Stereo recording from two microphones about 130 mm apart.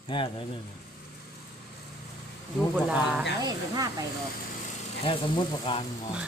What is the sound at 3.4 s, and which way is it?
Speech, 30° right (ahead or behind).